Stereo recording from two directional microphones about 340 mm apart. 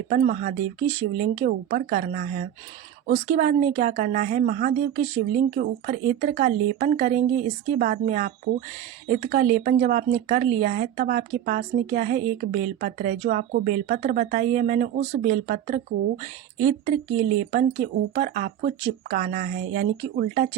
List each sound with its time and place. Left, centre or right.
0.1 s speech: right